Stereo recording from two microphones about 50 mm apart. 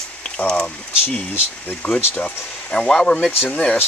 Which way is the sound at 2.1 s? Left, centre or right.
Left.